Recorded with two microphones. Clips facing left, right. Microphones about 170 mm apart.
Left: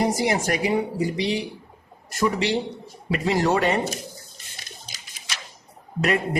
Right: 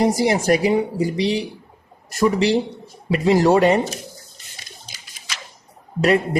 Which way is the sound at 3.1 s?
35° right (ahead or behind).